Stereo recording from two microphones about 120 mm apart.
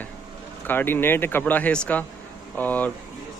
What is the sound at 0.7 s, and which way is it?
Speech, 15° left (ahead or behind).